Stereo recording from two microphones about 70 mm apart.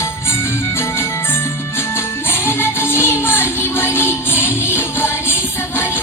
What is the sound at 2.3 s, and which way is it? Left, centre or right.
Music, left.